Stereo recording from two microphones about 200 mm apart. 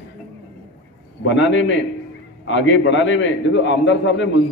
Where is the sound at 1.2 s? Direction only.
70° left (ahead or behind).